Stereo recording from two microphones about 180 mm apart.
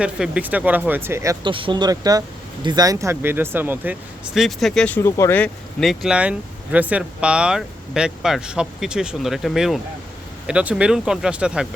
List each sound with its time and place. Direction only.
0.0 s speech: 5° right (ahead or behind)
1.5 s speech: 30° right (ahead or behind); by 3.9 s 10° right (ahead or behind)
4.4 s speech: centre (ahead or behind)
5.8 s speech: centre (ahead or behind)